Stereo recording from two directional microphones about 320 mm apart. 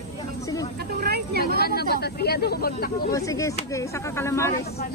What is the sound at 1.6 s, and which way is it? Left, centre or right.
Speech, left.